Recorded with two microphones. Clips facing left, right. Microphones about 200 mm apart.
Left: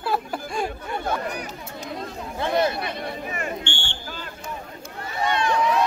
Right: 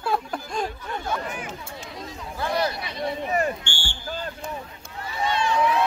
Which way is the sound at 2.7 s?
55° left (ahead or behind).